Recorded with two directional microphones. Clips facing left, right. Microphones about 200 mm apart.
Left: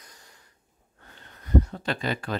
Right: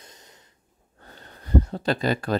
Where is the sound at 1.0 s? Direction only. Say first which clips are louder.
Right 3 dB; 35° right (ahead or behind).